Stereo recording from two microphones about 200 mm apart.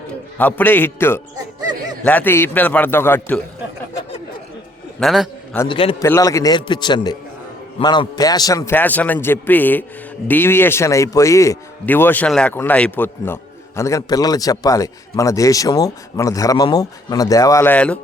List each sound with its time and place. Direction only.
0.1 s speech: 5° left (ahead or behind)
4.9 s a man's voice: centre (ahead or behind)
5.6 s a man's voice: 25° left (ahead or behind)
6.0 s a man's voice: 15° left (ahead or behind)